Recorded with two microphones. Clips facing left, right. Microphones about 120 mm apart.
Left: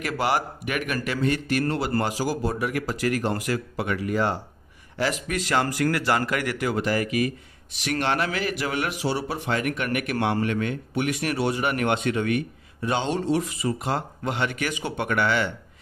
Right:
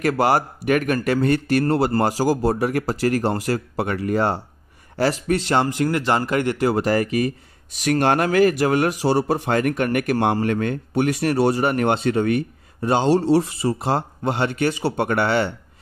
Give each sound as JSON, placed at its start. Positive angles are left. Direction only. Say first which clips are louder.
{"t": 0.0, "sound": "speech", "louder": "right 6 dB", "side_deg": -40}
{"t": 6.7, "sound": "speech", "louder": "right 5 dB", "side_deg": -40}